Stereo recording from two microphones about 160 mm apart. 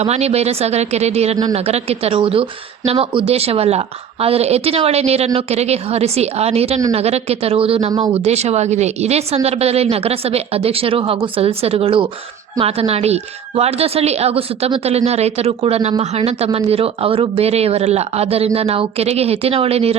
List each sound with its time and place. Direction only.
0.0 s a woman's voice: 40° right (ahead or behind)
7.9 s speech: 30° right (ahead or behind)
8.2 s a woman's voice: 40° right (ahead or behind)